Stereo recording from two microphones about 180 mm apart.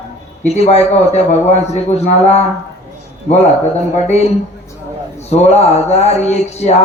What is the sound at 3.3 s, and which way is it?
A man's voice, 40° left (ahead or behind).